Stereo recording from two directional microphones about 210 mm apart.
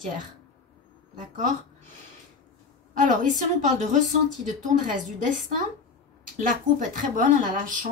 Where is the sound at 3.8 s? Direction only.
35° right (ahead or behind).